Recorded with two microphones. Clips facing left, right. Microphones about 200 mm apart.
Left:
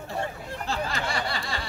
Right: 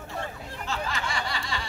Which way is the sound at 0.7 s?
35° left (ahead or behind).